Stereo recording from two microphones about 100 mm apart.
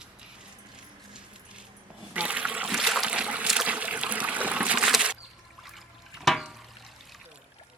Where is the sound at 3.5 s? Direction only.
10° right (ahead or behind).